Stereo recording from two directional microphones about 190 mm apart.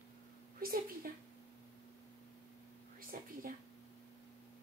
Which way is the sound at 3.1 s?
50° right (ahead or behind).